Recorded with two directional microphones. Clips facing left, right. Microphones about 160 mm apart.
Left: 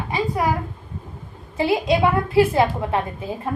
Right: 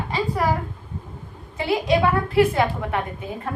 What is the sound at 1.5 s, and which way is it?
A woman's voice, 25° left (ahead or behind).